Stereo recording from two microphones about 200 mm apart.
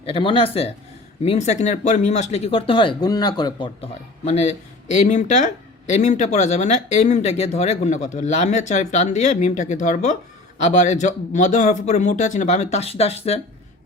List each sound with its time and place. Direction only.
0.0 s speech: 25° left (ahead or behind)
4.3 s speech: 35° left (ahead or behind)